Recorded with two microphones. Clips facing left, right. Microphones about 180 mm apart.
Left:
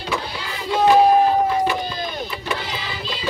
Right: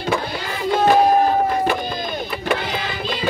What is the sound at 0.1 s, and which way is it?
Child singing, 55° right (ahead or behind).